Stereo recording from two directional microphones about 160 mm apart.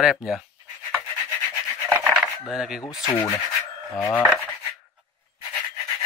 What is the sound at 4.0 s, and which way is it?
Speech, 15° left (ahead or behind).